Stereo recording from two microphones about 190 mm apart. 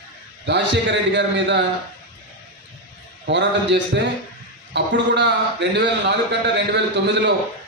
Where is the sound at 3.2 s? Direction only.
65° right (ahead or behind).